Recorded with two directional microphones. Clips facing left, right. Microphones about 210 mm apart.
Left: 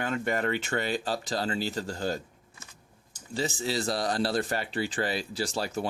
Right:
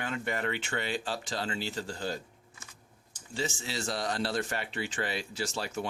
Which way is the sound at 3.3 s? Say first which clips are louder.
Left 5 dB; 35° left (ahead or behind).